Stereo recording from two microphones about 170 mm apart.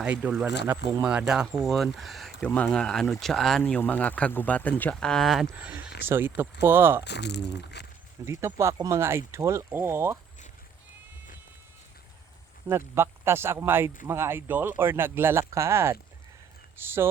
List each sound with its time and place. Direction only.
0.0 s speech: 5° right (ahead or behind)
5.5 s speech: 10° right (ahead or behind)
7.0 s speech: 85° left
8.2 s speech: 15° right (ahead or behind)
12.6 s speech: 15° right (ahead or behind)